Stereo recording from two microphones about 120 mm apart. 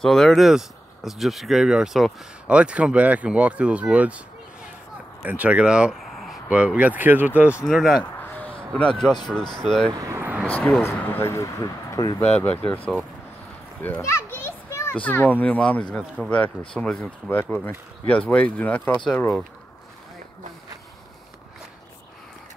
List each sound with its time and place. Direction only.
0.0 s speech: 5° left (ahead or behind)
5.2 s speech: 10° right (ahead or behind)
7.6 s speech: centre (ahead or behind)
8.0 s a sound: 15° left (ahead or behind)
9.6 s speech: 5° left (ahead or behind)
9.9 s vehicle: 25° right (ahead or behind)
10.4 s speech: 15° left (ahead or behind); by 12.2 s 30° left (ahead or behind)
12.4 s speech: 15° left (ahead or behind)
13.8 s children playing: 20° left (ahead or behind)
15.0 s speech: 15° left (ahead or behind)